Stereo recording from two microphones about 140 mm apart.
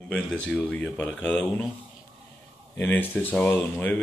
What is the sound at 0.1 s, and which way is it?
Speech, centre (ahead or behind).